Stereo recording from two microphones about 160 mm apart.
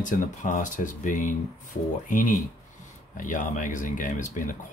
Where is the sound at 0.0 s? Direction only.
55° left (ahead or behind).